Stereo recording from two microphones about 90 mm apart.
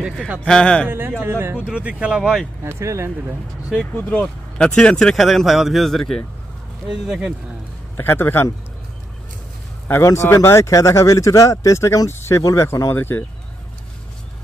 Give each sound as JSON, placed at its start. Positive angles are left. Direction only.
{"t": 0.4, "sound": "a man's voice", "side_deg": 10}
{"t": 0.8, "sound": "speech", "side_deg": -20}
{"t": 1.6, "sound": "speech", "side_deg": -15}
{"t": 2.6, "sound": "speech", "side_deg": -30}
{"t": 3.9, "sound": "speech", "side_deg": 15}
{"t": 6.9, "sound": "speech", "side_deg": -10}
{"t": 8.0, "sound": "a man's voice", "side_deg": 25}
{"t": 9.8, "sound": "speech", "side_deg": 30}
{"t": 12.9, "sound": "a man's voice", "side_deg": 25}